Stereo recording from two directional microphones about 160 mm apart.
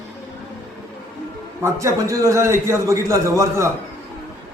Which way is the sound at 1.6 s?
20° right (ahead or behind).